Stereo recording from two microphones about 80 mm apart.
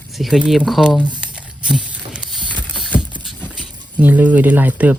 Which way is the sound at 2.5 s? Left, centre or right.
Centre.